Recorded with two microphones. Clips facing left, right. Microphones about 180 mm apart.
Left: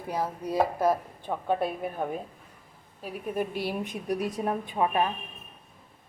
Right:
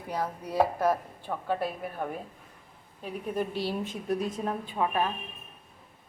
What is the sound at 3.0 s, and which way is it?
A woman's voice, 10° left (ahead or behind).